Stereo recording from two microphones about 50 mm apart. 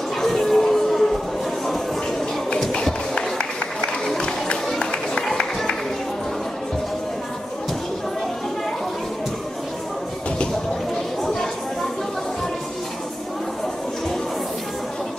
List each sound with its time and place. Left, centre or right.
0.2 s a sound: centre
3.2 s run: centre
4.7 s music: centre